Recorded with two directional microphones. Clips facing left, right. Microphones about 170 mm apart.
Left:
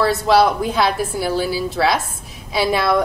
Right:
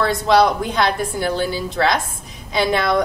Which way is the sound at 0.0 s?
5° left (ahead or behind).